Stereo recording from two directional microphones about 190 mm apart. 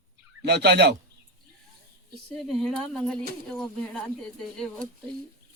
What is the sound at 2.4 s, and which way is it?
Speech, centre (ahead or behind).